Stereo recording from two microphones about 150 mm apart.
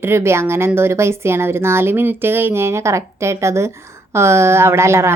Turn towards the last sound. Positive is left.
turn(degrees=-20)  # may be behind; listen again after turning